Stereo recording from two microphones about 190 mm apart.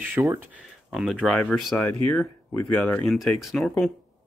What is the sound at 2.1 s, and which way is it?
Speech, 5° left (ahead or behind).